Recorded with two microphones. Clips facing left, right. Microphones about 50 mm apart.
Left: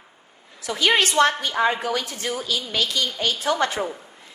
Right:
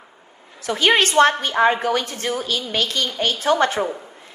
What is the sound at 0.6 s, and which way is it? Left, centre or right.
A woman's voice, right.